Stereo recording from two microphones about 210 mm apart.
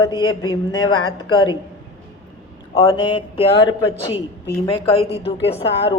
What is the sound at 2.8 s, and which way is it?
A man's voice, 20° left (ahead or behind).